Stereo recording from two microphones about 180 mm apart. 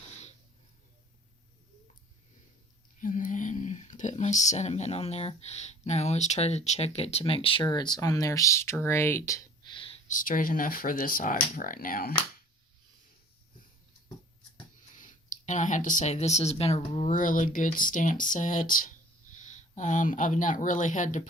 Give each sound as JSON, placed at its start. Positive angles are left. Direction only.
{"t": 3.0, "sound": "speech", "side_deg": 45}
{"t": 9.7, "sound": "a sound", "side_deg": 30}
{"t": 10.1, "sound": "speech", "side_deg": 50}
{"t": 14.9, "sound": "speech", "side_deg": 45}